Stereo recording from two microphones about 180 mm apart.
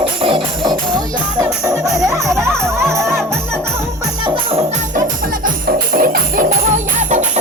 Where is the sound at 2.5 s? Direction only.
Centre (ahead or behind).